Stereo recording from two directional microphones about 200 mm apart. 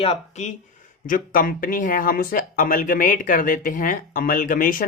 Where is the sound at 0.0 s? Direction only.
35° left (ahead or behind).